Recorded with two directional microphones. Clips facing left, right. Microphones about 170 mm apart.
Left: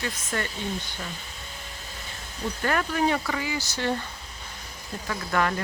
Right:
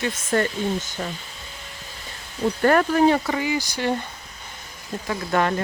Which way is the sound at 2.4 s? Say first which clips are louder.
Right 9 dB; 45° right (ahead or behind).